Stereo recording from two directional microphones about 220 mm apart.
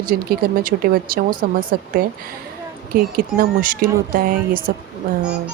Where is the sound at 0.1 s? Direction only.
40° right (ahead or behind).